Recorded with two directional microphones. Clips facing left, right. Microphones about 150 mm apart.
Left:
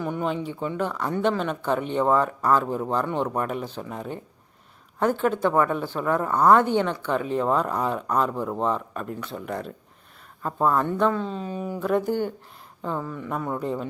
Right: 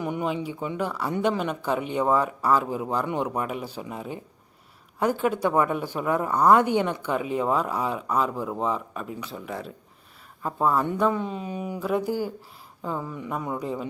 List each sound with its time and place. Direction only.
0.0 s a woman's voice: 15° right (ahead or behind)